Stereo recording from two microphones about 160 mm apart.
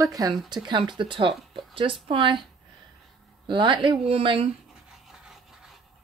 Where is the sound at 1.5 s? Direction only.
35° right (ahead or behind).